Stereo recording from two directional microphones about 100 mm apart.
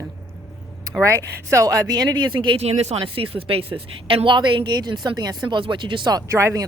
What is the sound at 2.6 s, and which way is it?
Speech, 90° right.